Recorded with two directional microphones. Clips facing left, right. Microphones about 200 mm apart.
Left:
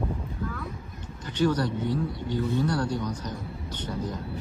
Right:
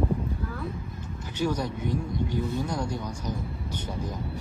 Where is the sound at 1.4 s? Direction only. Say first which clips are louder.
Left 4 dB; 10° right (ahead or behind).